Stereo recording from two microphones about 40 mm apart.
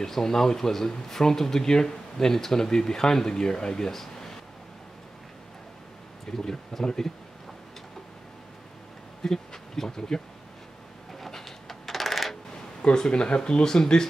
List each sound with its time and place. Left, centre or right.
0.0 s speech: centre
6.3 s speech: centre
9.2 s speech: centre
11.1 s coin: centre
12.8 s speech: left